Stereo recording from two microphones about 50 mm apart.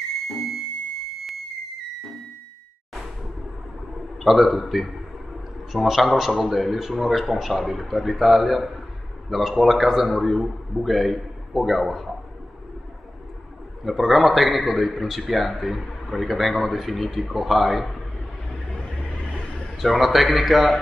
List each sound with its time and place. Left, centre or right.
4.2 s a man's voice: centre
13.8 s a man's voice: centre
18.5 s vehicle: centre
19.8 s a man's voice: centre